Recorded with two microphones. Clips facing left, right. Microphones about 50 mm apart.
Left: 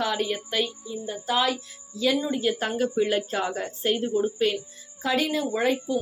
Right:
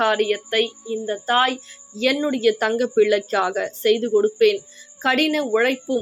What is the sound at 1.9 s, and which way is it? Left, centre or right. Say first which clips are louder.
A woman's voice: right 4 dB; right.